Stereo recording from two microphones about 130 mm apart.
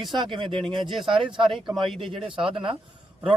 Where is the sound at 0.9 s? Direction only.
Centre (ahead or behind).